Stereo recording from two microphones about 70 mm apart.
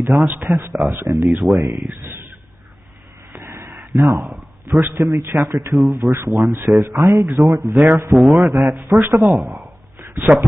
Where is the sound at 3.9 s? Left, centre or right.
Right.